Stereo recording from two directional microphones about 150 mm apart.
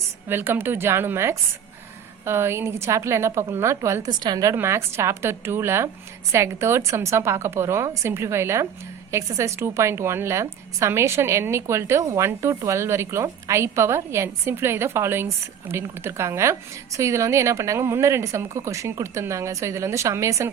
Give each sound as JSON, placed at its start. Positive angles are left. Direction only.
{"t": 0.3, "sound": "a woman's voice", "side_deg": -15}